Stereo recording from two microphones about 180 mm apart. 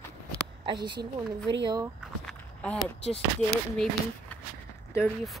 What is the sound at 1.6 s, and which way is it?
Speech, 20° right (ahead or behind).